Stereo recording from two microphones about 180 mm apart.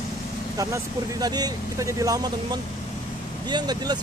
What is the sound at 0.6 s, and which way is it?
Speech, 20° right (ahead or behind).